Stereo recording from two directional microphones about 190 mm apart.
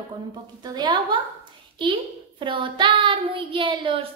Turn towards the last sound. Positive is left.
turn(degrees=-25)  # may be behind; listen again after turning